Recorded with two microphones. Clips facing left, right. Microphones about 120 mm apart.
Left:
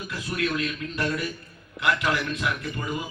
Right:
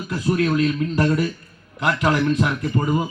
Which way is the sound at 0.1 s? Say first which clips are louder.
Right 9 dB; 40° right (ahead or behind).